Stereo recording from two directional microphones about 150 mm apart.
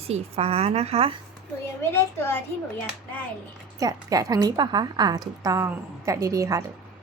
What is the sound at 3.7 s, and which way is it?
A woman's voice, 25° right (ahead or behind).